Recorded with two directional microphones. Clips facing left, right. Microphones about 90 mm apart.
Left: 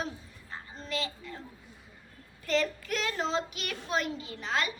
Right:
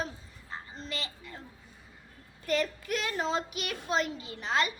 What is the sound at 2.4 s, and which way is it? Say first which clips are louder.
A child's voice: left 1 dB; 10° right (ahead or behind).